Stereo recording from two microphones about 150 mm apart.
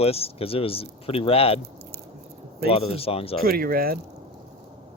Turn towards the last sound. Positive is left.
turn(degrees=-80)